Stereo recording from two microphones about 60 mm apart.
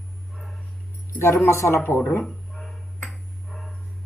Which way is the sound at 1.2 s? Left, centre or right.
Left.